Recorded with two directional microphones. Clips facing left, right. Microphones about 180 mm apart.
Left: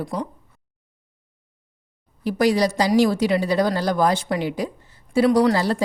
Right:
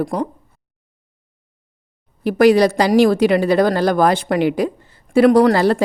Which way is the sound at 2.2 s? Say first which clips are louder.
Right 7 dB; 60° right (ahead or behind).